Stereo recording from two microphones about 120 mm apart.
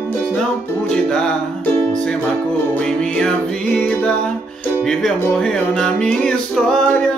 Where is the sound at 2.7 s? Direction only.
10° left (ahead or behind).